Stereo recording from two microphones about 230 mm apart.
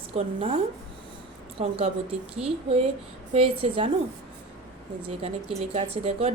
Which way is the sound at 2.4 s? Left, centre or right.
Right.